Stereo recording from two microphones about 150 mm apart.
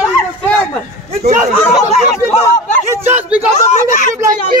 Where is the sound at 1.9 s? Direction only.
45° left (ahead or behind).